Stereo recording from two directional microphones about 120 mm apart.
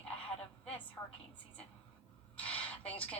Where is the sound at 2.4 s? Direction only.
10° left (ahead or behind).